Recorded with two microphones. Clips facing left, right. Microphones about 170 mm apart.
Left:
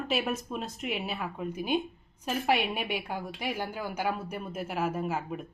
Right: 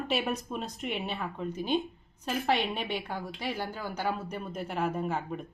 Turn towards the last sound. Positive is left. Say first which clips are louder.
# even
turn(degrees=5)  # may be behind; listen again after turning